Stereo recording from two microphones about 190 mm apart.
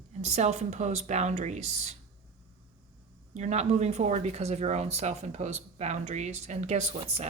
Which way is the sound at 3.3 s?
35° right (ahead or behind).